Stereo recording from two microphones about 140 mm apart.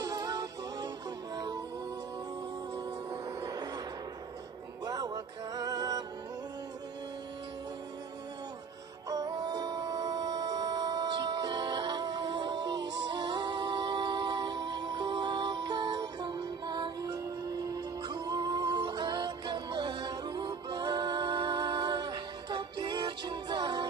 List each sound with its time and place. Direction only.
0.0 s music: 25° right (ahead or behind)
2.7 s music: 25° right (ahead or behind)
4.8 s music: 25° right (ahead or behind)
9.1 s music: 30° right (ahead or behind)